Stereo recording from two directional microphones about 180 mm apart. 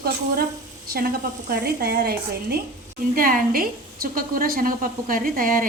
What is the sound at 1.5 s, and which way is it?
A woman's voice, 60° right (ahead or behind).